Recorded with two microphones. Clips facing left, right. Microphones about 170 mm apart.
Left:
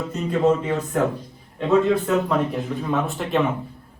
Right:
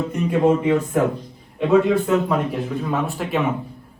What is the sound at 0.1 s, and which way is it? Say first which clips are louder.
Speech: right 1 dB; 15° right (ahead or behind).